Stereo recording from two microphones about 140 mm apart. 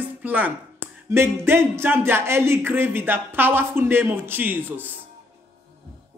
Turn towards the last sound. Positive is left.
turn(degrees=-15)  # may be behind; listen again after turning